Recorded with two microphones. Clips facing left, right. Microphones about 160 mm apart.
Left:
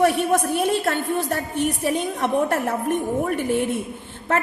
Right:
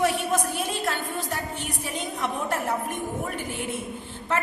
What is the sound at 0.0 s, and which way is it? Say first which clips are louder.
A woman's voice: left 6 dB; 60° left (ahead or behind).